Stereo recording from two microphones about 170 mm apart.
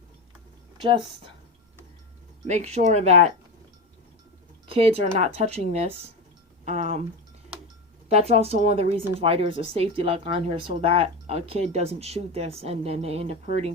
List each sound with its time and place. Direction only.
0.8 s speech: 30° right (ahead or behind)
2.5 s speech: 40° right (ahead or behind)
4.7 s speech: 35° right (ahead or behind)
8.1 s speech: 35° right (ahead or behind)